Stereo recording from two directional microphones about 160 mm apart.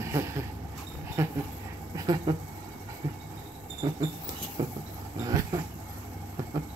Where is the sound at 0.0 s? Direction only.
20° right (ahead or behind).